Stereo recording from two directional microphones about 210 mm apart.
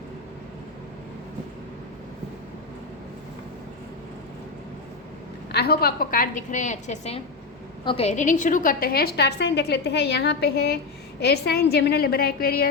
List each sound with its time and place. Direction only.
5.5 s a woman's voice: 50° left (ahead or behind)